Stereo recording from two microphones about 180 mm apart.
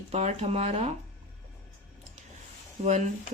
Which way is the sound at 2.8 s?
40° right (ahead or behind).